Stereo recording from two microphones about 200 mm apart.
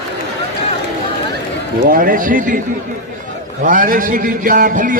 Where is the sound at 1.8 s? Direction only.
45° right (ahead or behind).